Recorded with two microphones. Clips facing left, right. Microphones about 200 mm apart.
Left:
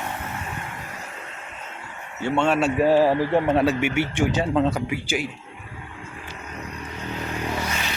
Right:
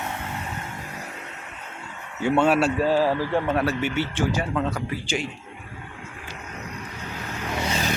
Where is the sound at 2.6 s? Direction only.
15° left (ahead or behind).